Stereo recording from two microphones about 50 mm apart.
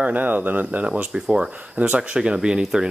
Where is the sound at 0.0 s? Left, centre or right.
Right; by 1.5 s centre.